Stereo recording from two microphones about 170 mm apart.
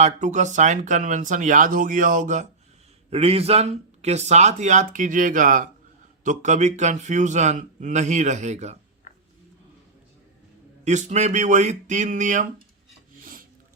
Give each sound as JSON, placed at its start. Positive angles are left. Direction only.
{"t": 0.0, "sound": "a man's voice", "side_deg": -45}
{"t": 3.1, "sound": "a man's voice", "side_deg": -35}
{"t": 10.8, "sound": "a man's voice", "side_deg": -45}